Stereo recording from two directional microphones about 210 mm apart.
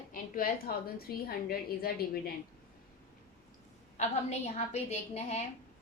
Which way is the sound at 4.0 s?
30° left (ahead or behind).